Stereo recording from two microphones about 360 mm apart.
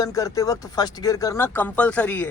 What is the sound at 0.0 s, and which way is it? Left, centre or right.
Speech, centre.